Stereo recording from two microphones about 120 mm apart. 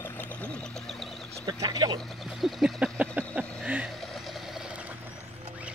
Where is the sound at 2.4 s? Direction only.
Centre (ahead or behind).